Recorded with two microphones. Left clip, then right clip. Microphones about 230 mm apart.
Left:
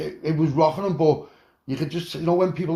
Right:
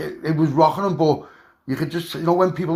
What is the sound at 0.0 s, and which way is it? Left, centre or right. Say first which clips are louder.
Speech: right 2 dB; right.